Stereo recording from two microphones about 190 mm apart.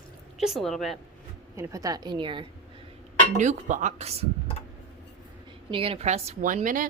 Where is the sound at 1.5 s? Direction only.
15° right (ahead or behind).